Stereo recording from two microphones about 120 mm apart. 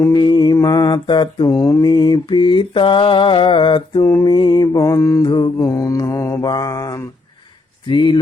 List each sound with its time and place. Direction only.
0.0 s mantra: 40° left (ahead or behind)
1.5 s mantra: 30° left (ahead or behind)
4.0 s mantra: 30° left (ahead or behind)